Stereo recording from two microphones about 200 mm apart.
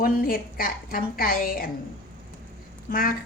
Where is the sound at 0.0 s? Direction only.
45° left (ahead or behind).